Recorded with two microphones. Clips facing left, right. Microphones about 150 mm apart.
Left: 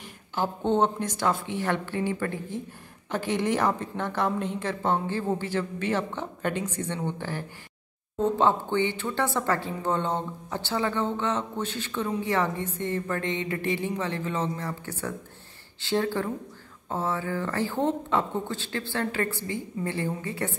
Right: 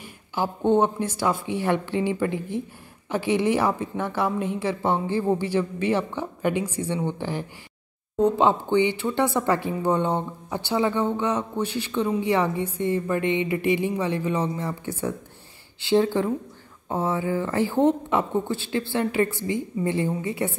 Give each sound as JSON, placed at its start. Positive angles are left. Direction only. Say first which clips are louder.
{"t": 0.0, "sound": "a woman's voice", "louder": "right 2 dB", "side_deg": -10}